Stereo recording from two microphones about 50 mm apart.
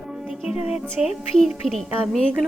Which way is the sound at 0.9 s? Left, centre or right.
Centre.